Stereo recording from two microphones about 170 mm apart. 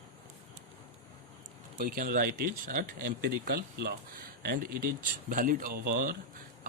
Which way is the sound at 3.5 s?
70° right (ahead or behind).